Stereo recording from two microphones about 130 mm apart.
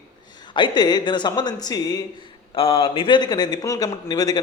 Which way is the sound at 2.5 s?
45° left (ahead or behind).